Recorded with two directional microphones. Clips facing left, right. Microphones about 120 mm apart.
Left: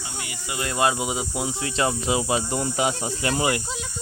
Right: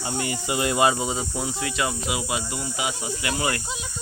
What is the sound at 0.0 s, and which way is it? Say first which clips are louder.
Speech: right 8 dB; 40° right (ahead or behind).